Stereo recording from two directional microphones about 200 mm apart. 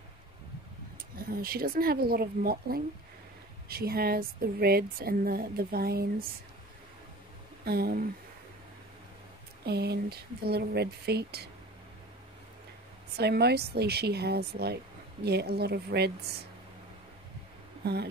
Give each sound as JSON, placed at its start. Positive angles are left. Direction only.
{"t": 1.1, "sound": "speech", "side_deg": -50}
{"t": 7.6, "sound": "speech", "side_deg": -50}
{"t": 9.7, "sound": "speech", "side_deg": -55}
{"t": 13.1, "sound": "speech", "side_deg": -55}